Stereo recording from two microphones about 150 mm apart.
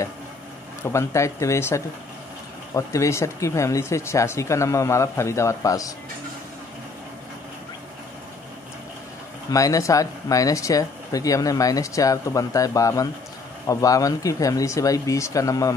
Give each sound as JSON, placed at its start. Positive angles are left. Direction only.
{"t": 0.8, "sound": "speech", "side_deg": 20}
{"t": 9.5, "sound": "speech", "side_deg": 20}